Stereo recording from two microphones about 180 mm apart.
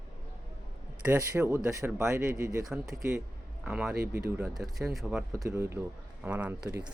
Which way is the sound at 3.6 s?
5° right (ahead or behind).